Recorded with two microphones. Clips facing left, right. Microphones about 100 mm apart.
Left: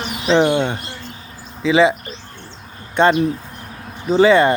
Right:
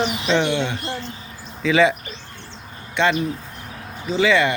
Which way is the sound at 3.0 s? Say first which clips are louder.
Left 5 dB; 45° left (ahead or behind).